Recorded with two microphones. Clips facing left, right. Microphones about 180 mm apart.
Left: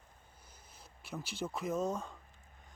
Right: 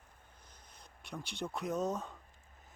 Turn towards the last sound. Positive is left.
turn(degrees=0)  # may be behind; listen again after turning